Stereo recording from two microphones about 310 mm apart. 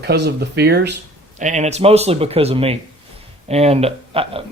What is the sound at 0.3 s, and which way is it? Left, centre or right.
Speech, right.